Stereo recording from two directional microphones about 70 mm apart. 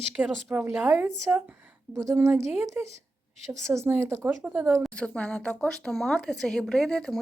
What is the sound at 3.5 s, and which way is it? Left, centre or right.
Speech, right.